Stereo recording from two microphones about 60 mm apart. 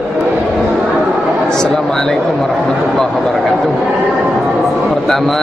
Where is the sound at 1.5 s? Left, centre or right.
Centre.